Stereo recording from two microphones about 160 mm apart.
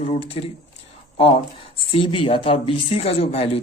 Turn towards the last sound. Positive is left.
turn(degrees=40)  # may be behind; listen again after turning